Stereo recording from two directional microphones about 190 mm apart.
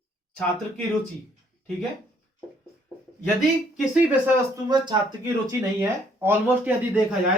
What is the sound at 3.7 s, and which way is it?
Speech, 5° right (ahead or behind).